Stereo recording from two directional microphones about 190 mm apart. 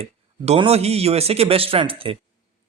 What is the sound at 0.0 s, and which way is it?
Speech, 30° right (ahead or behind).